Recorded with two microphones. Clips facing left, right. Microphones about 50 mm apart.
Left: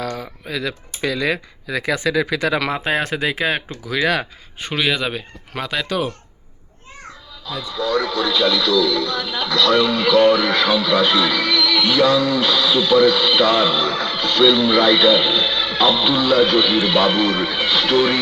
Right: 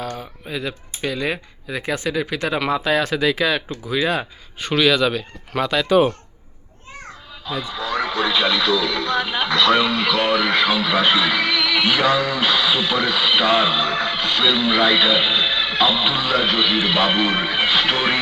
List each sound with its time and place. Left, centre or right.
0.0 s speech: left
2.6 s speech: left
3.8 s speech: left
4.6 s a man's voice: centre
5.5 s speech: centre
7.4 s speech: right
9.8 s speech: centre; by 18.2 s right